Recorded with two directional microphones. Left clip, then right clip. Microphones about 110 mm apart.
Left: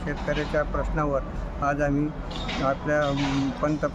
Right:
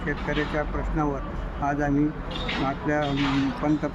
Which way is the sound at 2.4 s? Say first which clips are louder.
Left 1 dB; 45° left (ahead or behind).